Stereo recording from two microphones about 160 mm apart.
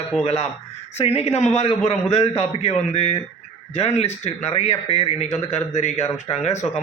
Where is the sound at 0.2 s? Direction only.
40° left (ahead or behind).